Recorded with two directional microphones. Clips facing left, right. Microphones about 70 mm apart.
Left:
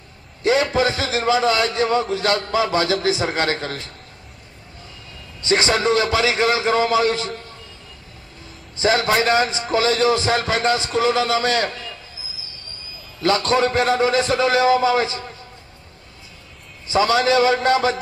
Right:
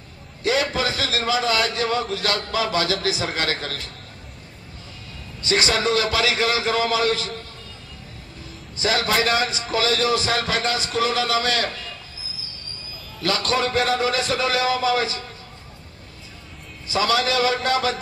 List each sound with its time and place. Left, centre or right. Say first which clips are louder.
0.4 s a man's voice: left 4 dB; left
5.4 s a man's voice: left 3 dB; left
8.7 s a man's voice: left 4 dB; left
13.2 s a man's voice: left 5 dB; left
16.8 s a man's voice: left 4 dB; left